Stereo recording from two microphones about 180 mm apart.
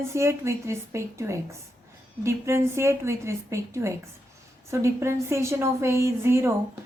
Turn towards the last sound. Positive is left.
turn(degrees=-15)  # may be behind; listen again after turning